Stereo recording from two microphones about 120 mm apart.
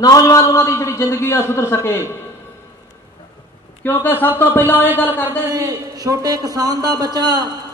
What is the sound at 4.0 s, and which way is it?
Speech, 15° left (ahead or behind).